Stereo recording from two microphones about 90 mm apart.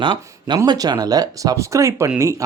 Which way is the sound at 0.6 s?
50° right (ahead or behind).